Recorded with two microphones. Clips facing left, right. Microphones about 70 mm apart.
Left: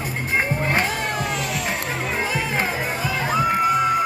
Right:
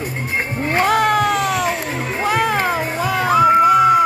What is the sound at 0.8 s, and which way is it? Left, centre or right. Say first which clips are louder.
Cat: right 9 dB; right.